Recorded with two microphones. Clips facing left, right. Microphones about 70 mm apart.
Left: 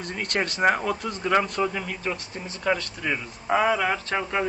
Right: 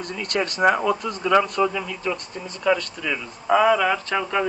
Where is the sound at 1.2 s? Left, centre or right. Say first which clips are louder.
Right 4 dB; left.